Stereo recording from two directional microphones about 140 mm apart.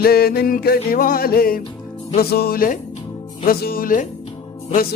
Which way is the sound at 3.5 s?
90° left.